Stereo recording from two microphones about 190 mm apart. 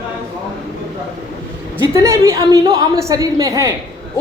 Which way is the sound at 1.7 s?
15° right (ahead or behind).